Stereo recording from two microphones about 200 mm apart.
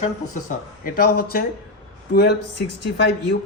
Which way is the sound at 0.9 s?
50° left (ahead or behind).